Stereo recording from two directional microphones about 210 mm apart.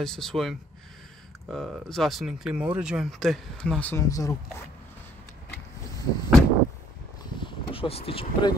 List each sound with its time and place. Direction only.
0.0 s speech: centre (ahead or behind)
5.9 s a sound: 15° left (ahead or behind)
7.4 s speech: 25° left (ahead or behind)